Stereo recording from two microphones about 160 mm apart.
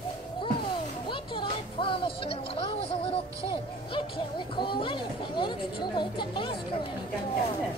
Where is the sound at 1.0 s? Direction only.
30° left (ahead or behind).